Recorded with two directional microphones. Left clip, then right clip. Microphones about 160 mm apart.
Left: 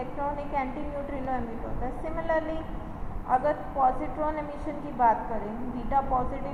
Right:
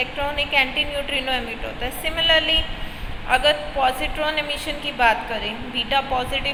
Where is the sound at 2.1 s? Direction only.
55° right (ahead or behind).